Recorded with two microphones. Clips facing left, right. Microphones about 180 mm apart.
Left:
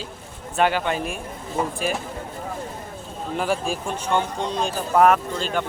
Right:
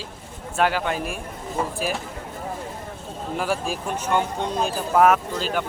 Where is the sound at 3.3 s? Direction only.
5° right (ahead or behind).